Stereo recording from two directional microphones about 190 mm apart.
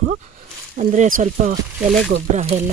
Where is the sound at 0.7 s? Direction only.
45° right (ahead or behind).